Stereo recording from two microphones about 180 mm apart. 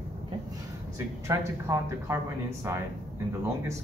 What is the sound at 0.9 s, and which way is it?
Speech, 15° right (ahead or behind).